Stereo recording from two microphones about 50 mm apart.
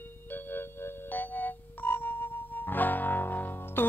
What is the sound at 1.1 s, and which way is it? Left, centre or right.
Music, left.